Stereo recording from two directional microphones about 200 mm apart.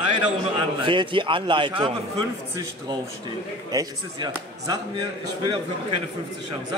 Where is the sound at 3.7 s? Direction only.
20° right (ahead or behind).